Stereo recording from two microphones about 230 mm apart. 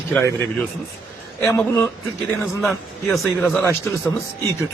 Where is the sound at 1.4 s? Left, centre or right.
Centre.